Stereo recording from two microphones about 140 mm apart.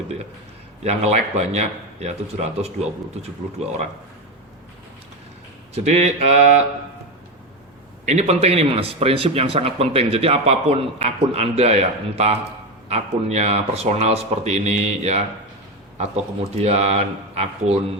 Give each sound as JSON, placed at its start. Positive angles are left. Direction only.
{"t": 0.9, "sound": "speech", "side_deg": -50}
{"t": 5.7, "sound": "speech", "side_deg": -50}
{"t": 8.0, "sound": "speech", "side_deg": -50}
{"t": 16.6, "sound": "speech", "side_deg": -50}